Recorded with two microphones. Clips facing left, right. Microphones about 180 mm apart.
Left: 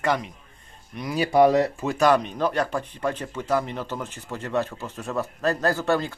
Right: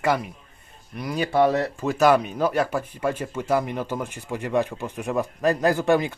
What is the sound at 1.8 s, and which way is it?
Speech, 5° right (ahead or behind).